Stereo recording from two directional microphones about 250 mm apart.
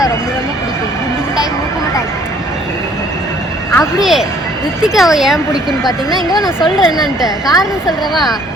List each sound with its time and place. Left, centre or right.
3.8 s speech: centre
6.9 s a woman's voice: centre
7.6 s speech: centre